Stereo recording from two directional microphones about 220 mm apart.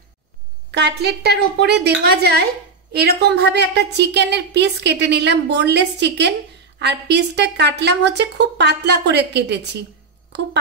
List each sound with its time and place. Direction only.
0.7 s a woman's voice: 50° right (ahead or behind)